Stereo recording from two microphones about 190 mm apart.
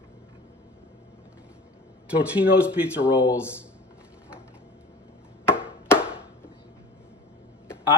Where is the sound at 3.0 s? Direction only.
15° left (ahead or behind).